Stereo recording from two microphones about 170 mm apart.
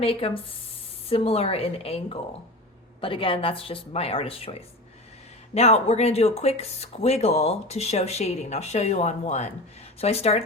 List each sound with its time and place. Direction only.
0.0 s speech: 35° left (ahead or behind)